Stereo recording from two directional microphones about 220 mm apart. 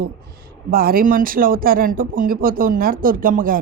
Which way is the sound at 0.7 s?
40° right (ahead or behind).